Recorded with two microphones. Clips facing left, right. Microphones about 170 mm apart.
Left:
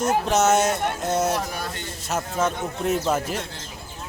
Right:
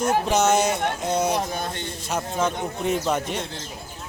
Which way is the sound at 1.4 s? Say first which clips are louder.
Right 2 dB; 25° right (ahead or behind).